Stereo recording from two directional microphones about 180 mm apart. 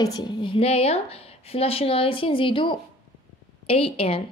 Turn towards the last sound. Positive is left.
turn(degrees=30)  # may be behind; listen again after turning